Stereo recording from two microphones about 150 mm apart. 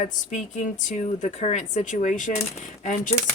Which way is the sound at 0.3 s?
55° left (ahead or behind).